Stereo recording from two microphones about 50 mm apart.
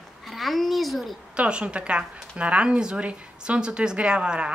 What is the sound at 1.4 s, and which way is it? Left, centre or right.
A woman's voice, right.